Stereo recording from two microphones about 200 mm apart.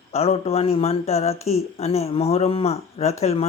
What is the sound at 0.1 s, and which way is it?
Speech, 30° left (ahead or behind).